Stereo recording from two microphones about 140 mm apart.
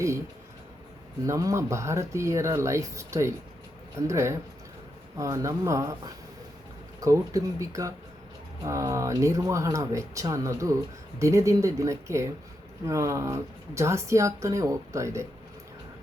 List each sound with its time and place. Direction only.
1.3 s speech: 20° right (ahead or behind)
7.0 s speech: 25° right (ahead or behind)